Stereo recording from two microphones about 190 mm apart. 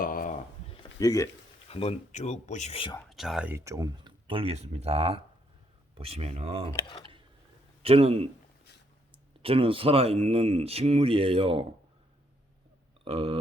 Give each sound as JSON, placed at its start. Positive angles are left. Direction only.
{"t": 0.0, "sound": "a sound", "side_deg": 45}
{"t": 0.7, "sound": "a sound", "side_deg": 25}
{"t": 1.7, "sound": "speech", "side_deg": 30}
{"t": 3.1, "sound": "speech", "side_deg": 0}
{"t": 6.7, "sound": "speech", "side_deg": 25}
{"t": 7.8, "sound": "a man's voice", "side_deg": -30}
{"t": 13.1, "sound": "speech", "side_deg": -30}